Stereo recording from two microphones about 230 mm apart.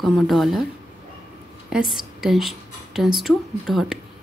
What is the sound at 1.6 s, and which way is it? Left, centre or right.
A woman's voice, centre.